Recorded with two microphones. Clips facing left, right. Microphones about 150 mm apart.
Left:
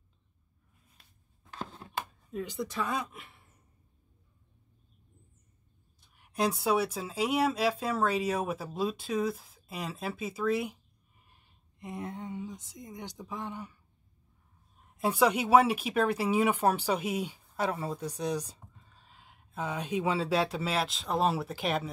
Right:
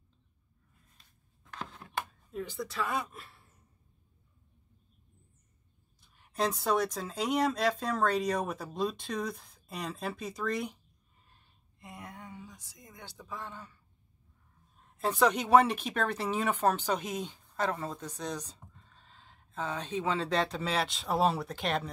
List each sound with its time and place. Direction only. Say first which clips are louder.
1.5 s a sound: left 2 dB; 30° left (ahead or behind)
2.3 s speech: left 2 dB; 20° left (ahead or behind)
6.1 s speech: left 2 dB; 10° left (ahead or behind)
11.8 s speech: left 8 dB; 25° left (ahead or behind)
15.0 s speech: left 1 dB; 10° left (ahead or behind)